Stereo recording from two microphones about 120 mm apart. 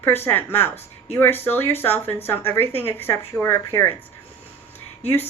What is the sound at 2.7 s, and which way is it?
Speech, 55° left (ahead or behind).